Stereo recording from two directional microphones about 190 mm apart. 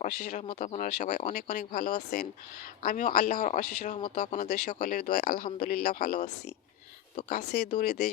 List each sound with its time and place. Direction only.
0.0 s speech: 40° left (ahead or behind)
7.3 s speech: 45° left (ahead or behind)